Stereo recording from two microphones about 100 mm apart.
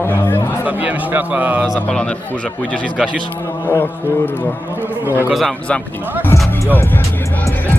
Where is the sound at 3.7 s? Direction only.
20° left (ahead or behind).